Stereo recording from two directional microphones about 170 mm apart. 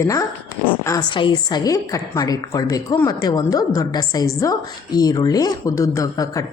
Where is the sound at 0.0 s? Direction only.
20° left (ahead or behind).